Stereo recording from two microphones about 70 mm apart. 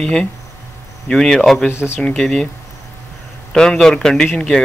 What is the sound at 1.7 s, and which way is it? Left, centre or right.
Speech, left.